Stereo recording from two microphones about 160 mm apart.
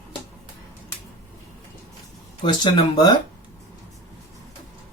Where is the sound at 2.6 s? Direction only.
25° left (ahead or behind).